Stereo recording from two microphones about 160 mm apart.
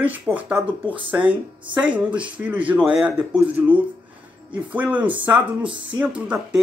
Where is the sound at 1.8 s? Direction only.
10° right (ahead or behind).